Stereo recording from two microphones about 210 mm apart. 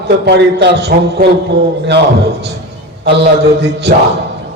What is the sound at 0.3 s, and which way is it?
A man's voice, 50° right (ahead or behind).